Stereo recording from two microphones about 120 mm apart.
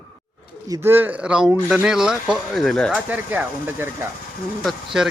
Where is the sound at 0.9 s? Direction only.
15° right (ahead or behind); by 3.0 s 5° left (ahead or behind).